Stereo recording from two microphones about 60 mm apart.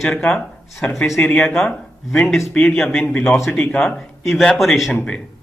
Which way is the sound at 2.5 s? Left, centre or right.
Centre.